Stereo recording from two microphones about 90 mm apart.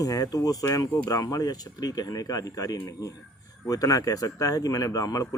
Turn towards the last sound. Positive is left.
turn(degrees=40)  # may be behind; listen again after turning